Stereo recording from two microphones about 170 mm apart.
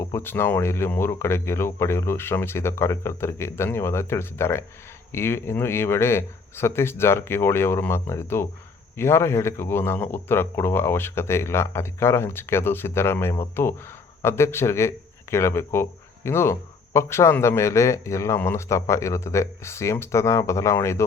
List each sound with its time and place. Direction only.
0.0 s speech: 15° left (ahead or behind)